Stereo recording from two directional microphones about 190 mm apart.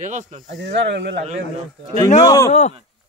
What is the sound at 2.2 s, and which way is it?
Speech, 20° left (ahead or behind).